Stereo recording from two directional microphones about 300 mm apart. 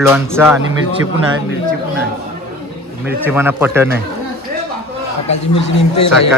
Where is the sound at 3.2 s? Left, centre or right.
Centre.